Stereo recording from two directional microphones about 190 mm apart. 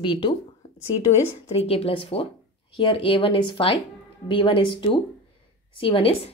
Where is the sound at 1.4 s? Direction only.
30° left (ahead or behind).